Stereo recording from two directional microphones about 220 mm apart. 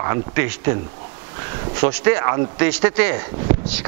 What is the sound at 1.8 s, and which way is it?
Speech, 15° right (ahead or behind).